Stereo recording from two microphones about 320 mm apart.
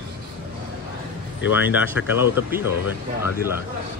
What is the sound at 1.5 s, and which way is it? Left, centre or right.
Speech, centre.